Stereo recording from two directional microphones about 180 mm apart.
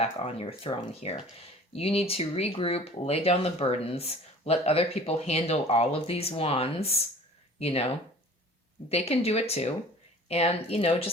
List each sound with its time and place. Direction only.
0.0 s speech: 35° left (ahead or behind)
8.9 s speech: 35° left (ahead or behind)